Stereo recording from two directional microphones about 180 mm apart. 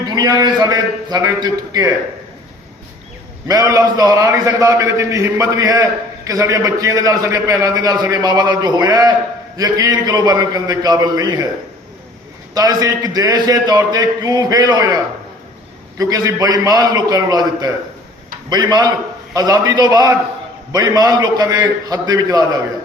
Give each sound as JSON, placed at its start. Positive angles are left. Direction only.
{"t": 0.0, "sound": "a man's voice", "side_deg": -25}
{"t": 3.4, "sound": "a man's voice", "side_deg": -20}
{"t": 12.5, "sound": "a man's voice", "side_deg": -20}
{"t": 16.0, "sound": "a man's voice", "side_deg": -20}